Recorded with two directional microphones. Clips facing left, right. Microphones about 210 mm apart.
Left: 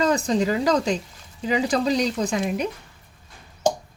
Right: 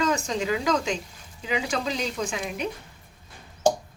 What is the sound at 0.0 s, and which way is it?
Speech, 35° left (ahead or behind).